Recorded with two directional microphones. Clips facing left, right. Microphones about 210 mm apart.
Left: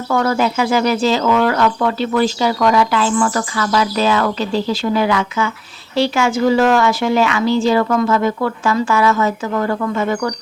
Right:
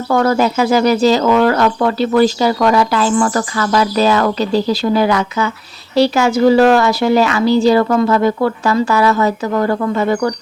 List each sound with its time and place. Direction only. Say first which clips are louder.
0.1 s speech: right 3 dB; 40° right (ahead or behind)